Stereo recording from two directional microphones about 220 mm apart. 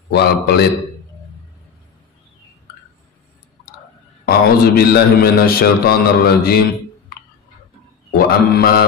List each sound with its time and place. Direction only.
0.1 s a man's voice: 45° left (ahead or behind)
4.3 s a man's voice: 45° left (ahead or behind)
8.1 s a man's voice: 45° left (ahead or behind)